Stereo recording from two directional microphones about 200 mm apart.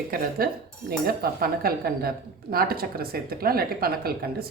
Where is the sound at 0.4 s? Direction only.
45° right (ahead or behind).